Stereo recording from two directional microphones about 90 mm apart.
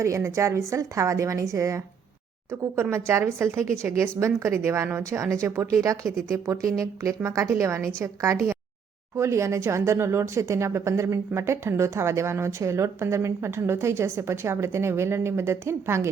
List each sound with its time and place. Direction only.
0.0 s speech: 30° right (ahead or behind)